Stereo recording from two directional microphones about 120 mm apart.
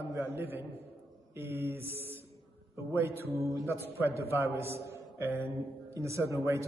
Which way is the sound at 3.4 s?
25° right (ahead or behind).